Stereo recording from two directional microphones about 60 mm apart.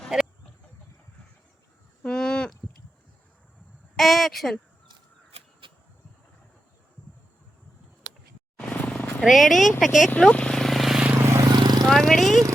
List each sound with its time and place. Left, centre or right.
0.1 s a sound: centre
2.0 s livestock: centre
3.9 s a sound: centre
8.7 s vehicle: left
9.2 s speech: centre
10.2 s speech: left
10.5 s vehicle: centre
11.3 s a sound: right
11.9 s speech: centre